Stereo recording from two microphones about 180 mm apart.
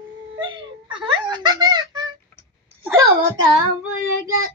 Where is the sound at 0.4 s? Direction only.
25° right (ahead or behind).